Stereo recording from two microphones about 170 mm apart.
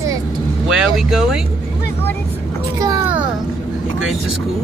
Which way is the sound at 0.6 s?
5° right (ahead or behind).